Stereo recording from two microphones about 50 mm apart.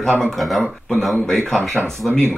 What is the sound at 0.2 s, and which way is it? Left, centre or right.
A man's voice, centre.